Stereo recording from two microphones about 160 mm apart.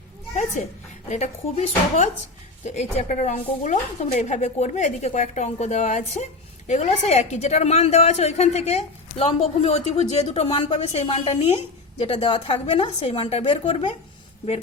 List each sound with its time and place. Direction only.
1.1 s a woman's voice: 45° left (ahead or behind)